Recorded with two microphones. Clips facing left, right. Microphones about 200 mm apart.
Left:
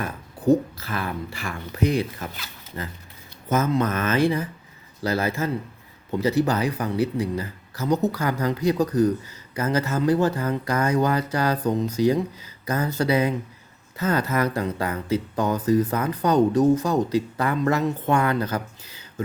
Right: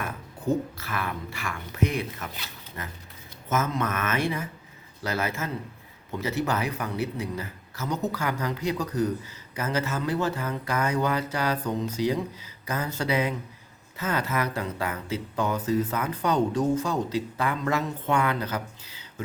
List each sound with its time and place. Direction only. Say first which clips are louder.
0.0 s speech: left 6 dB; 35° left (ahead or behind)